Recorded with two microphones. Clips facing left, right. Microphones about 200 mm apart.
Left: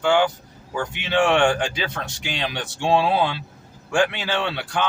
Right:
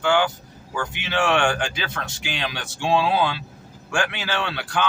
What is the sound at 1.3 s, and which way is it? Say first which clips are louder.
Speech: left 3 dB; 25° left (ahead or behind).